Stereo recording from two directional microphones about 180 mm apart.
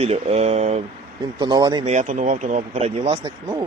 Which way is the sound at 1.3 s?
25° right (ahead or behind).